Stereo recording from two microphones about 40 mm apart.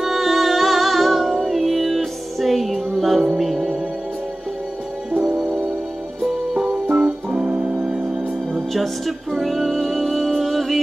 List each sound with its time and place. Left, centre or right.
0.0 s music: centre
6.5 s music: centre
7.8 s organ: centre
8.5 s music: centre